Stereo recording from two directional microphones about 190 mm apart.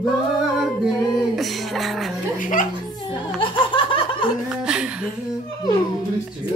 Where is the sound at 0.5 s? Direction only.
Centre (ahead or behind).